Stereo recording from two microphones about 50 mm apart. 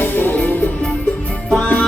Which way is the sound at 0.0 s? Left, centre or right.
Left.